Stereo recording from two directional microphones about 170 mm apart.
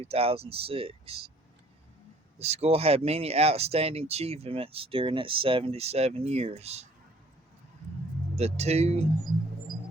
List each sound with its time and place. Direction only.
0.0 s speech: 35° right (ahead or behind)
2.4 s speech: 40° right (ahead or behind)
8.4 s speech: 40° right (ahead or behind)